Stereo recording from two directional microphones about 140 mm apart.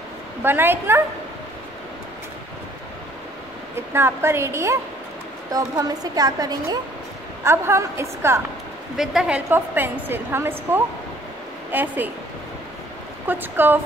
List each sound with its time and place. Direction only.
0.4 s a woman's voice: 15° right (ahead or behind)
3.7 s a woman's voice: 15° right (ahead or behind)
8.9 s a woman's voice: 5° right (ahead or behind)
13.3 s a woman's voice: 15° right (ahead or behind)